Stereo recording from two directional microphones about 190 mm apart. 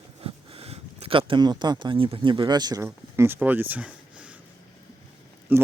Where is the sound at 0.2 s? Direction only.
30° right (ahead or behind); by 4.4 s 5° right (ahead or behind).